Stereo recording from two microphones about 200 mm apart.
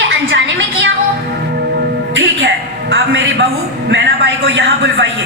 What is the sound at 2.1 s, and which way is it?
Music, 75° right (ahead or behind).